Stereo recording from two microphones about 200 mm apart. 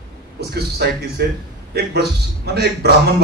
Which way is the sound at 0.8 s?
55° right (ahead or behind).